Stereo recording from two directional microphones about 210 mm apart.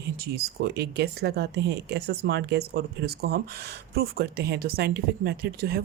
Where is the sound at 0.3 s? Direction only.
50° right (ahead or behind).